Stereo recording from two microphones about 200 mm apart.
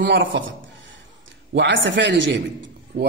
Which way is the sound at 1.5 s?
65° right (ahead or behind).